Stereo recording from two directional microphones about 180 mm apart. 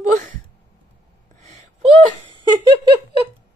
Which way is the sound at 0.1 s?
45° right (ahead or behind).